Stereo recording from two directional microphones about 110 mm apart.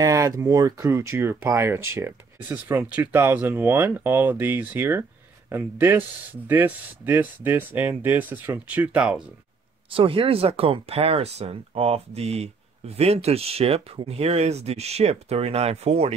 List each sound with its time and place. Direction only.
0.0 s speech: 30° right (ahead or behind); by 9.2 s 10° right (ahead or behind)
9.8 s speech: 55° right (ahead or behind); by 16.2 s 70° right (ahead or behind)